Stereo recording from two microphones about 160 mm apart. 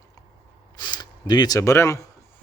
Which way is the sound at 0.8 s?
25° left (ahead or behind).